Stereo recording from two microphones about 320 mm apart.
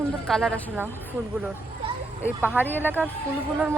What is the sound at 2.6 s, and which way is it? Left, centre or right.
Speech, centre.